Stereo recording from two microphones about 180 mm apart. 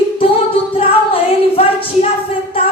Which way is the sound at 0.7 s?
30° left (ahead or behind).